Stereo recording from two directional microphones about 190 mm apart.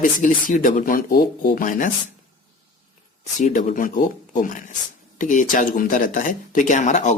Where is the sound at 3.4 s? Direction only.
40° left (ahead or behind).